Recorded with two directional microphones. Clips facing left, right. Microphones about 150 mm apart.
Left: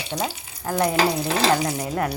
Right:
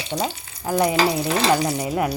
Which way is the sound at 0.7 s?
10° right (ahead or behind).